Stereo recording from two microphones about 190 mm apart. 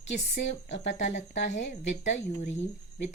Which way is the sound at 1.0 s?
40° left (ahead or behind).